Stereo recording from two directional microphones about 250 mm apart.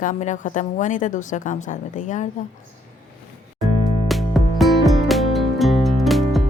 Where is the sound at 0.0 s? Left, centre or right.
Left.